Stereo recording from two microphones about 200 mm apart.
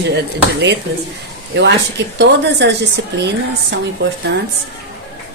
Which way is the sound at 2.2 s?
60° right (ahead or behind).